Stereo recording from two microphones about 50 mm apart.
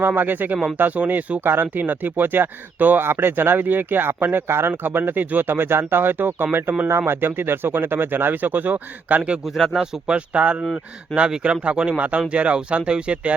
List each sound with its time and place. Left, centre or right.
0.2 s speech: right
3.0 s speech: right
5.2 s speech: right
5.5 s speech: right
9.6 s speech: centre
10.1 s speech: right